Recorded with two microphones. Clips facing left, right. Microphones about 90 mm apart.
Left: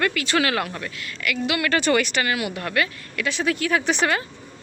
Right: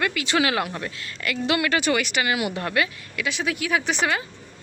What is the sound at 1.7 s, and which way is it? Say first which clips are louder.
Speech: left 2 dB; 5° right (ahead or behind).